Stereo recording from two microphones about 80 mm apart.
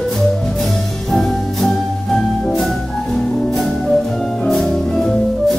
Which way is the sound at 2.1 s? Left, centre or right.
Centre.